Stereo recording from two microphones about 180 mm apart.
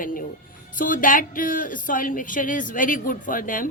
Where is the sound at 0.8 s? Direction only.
50° left (ahead or behind).